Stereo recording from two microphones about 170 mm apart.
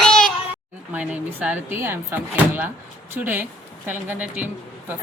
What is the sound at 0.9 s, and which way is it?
Speech, 10° right (ahead or behind).